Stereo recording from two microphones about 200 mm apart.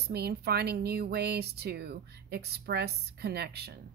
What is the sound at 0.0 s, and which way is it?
Speech, 55° right (ahead or behind).